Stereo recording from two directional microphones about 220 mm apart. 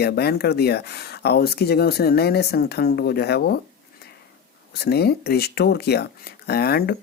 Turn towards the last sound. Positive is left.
turn(degrees=45)  # may be behind; listen again after turning